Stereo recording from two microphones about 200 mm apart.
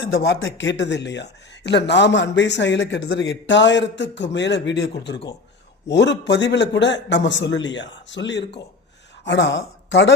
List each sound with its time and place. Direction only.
0.2 s a woman's voice: 65° left (ahead or behind)